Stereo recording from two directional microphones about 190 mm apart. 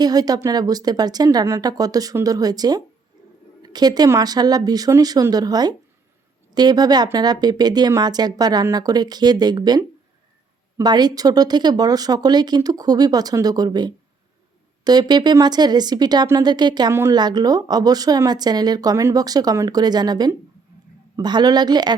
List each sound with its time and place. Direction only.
0.0 s speech: 20° right (ahead or behind)